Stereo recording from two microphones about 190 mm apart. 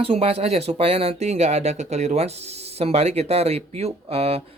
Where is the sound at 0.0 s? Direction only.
30° right (ahead or behind).